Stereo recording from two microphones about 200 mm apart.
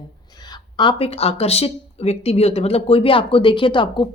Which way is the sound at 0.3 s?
20° left (ahead or behind).